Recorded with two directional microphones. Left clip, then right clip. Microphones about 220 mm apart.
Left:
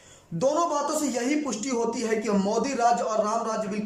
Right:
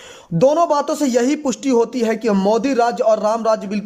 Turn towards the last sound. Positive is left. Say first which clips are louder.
# right 10 dB
turn(degrees=-40)  # may be behind; listen again after turning